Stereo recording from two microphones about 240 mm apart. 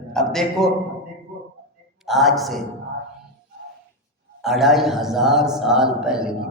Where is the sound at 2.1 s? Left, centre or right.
Centre.